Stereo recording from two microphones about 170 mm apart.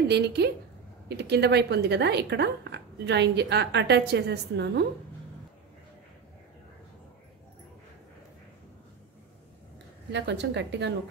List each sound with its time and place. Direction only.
0.1 s a woman's voice: 80° right
10.1 s a woman's voice: 90° right